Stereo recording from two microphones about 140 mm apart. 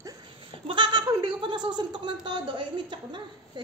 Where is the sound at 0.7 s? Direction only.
35° right (ahead or behind).